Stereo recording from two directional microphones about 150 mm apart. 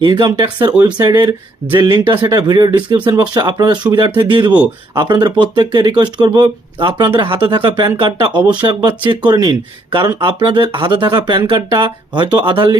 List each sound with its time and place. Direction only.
0.0 s speech: 30° right (ahead or behind)